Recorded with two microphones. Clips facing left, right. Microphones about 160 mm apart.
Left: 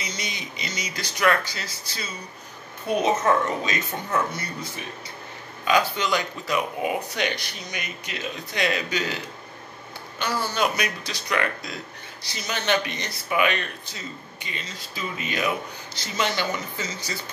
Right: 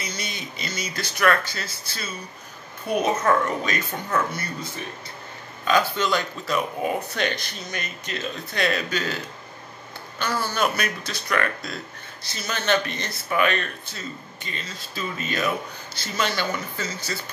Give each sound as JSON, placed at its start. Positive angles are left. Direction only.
{"t": 0.0, "sound": "speech", "side_deg": 20}
{"t": 5.7, "sound": "speech", "side_deg": 15}
{"t": 10.5, "sound": "speech", "side_deg": 15}